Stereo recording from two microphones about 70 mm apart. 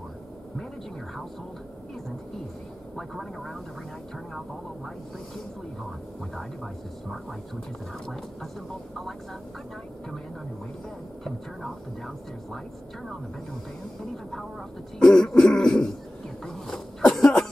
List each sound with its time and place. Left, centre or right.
3.0 s speech: centre
6.3 s speech: centre
15.0 s throat clearing: centre
16.4 s a sound: centre
17.1 s cough: centre